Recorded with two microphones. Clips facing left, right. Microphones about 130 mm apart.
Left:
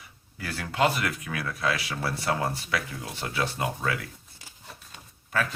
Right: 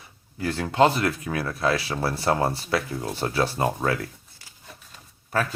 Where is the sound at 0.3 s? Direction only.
25° right (ahead or behind).